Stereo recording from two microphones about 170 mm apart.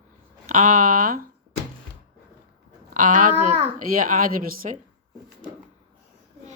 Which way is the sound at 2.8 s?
50° right (ahead or behind).